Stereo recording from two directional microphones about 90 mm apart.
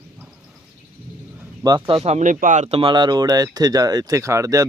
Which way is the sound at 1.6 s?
50° right (ahead or behind).